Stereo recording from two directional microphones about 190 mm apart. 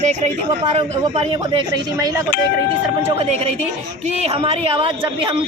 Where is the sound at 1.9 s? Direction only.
20° right (ahead or behind).